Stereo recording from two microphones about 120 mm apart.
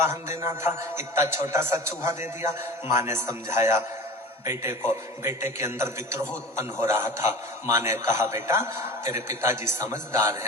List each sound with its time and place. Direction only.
0.0 s a man's voice: 20° right (ahead or behind)